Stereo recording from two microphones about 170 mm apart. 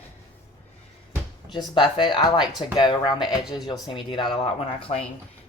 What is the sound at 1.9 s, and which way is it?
Speech, 25° left (ahead or behind).